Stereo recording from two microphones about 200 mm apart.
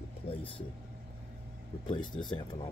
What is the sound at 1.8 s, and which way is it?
Speech, 20° left (ahead or behind).